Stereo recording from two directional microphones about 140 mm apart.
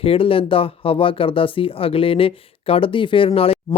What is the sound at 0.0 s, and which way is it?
Speech, 40° left (ahead or behind).